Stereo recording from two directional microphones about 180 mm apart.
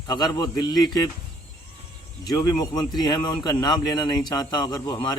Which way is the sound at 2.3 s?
20° left (ahead or behind).